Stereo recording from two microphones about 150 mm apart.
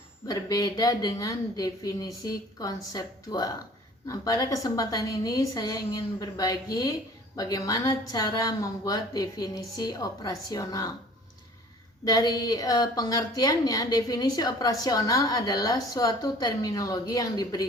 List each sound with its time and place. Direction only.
0.3 s a woman's voice: 25° left (ahead or behind)
12.0 s a woman's voice: 25° left (ahead or behind)